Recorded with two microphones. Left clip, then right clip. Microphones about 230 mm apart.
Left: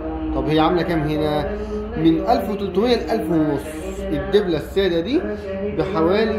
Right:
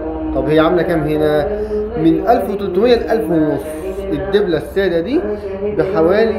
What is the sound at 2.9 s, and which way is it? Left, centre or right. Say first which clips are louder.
Speech: right 6 dB; centre.